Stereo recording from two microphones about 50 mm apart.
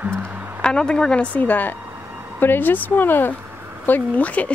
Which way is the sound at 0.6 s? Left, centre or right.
Centre.